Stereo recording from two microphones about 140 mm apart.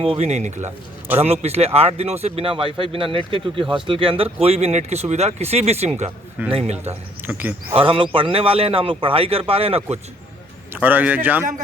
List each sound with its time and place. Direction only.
0.0 s a man's voice: 45° right (ahead or behind)
7.3 s a man's voice: 15° right (ahead or behind)
7.7 s a man's voice: 40° right (ahead or behind)
10.8 s a man's voice: 10° right (ahead or behind)